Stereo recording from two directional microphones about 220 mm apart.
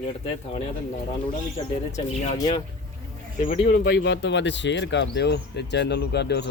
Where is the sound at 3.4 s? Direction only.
30° left (ahead or behind).